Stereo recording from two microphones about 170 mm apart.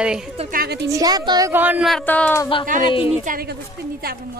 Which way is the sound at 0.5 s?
60° right (ahead or behind).